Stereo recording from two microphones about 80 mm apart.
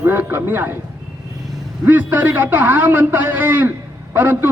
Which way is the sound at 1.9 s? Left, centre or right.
Right.